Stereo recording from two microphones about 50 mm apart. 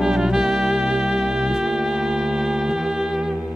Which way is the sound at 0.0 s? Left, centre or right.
Centre.